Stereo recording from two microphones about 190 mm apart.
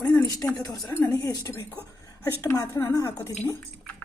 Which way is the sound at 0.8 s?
10° left (ahead or behind).